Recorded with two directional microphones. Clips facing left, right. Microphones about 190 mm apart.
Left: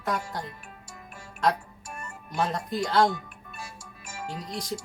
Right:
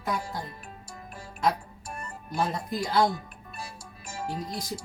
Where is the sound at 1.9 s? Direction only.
35° right (ahead or behind).